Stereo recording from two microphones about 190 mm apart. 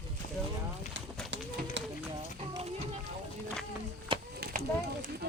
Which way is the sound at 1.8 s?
70° right (ahead or behind).